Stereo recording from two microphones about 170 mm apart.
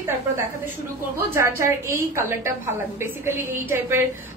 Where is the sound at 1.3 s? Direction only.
15° right (ahead or behind).